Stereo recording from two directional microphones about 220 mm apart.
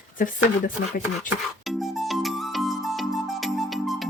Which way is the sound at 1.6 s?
Centre (ahead or behind).